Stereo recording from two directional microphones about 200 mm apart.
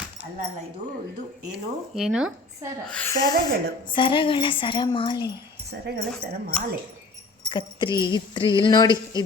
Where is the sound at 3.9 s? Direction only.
25° left (ahead or behind).